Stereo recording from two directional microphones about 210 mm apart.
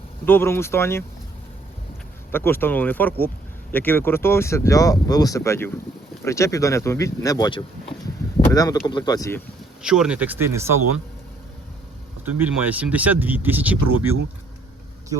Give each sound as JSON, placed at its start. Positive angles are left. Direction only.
{"t": 0.3, "sound": "speech", "side_deg": 10}
{"t": 2.3, "sound": "speech", "side_deg": 10}
{"t": 9.8, "sound": "speech", "side_deg": -5}
{"t": 12.2, "sound": "speech", "side_deg": -5}